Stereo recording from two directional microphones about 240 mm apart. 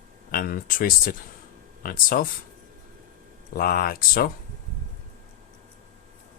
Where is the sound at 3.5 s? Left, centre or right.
Left.